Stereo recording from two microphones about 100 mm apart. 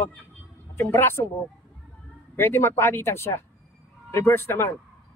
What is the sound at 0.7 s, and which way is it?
Speech, 25° left (ahead or behind).